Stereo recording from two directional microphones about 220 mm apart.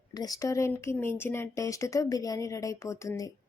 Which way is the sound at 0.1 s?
15° left (ahead or behind).